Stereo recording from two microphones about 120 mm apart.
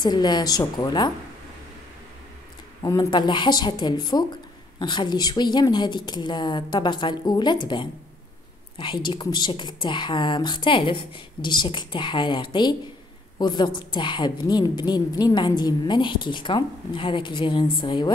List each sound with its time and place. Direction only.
0.0 s a woman's voice: 35° left (ahead or behind)
2.8 s speech: 25° left (ahead or behind)
3.1 s a woman's voice: 40° left (ahead or behind)